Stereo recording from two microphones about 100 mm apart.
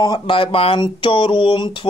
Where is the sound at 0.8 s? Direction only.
60° left (ahead or behind).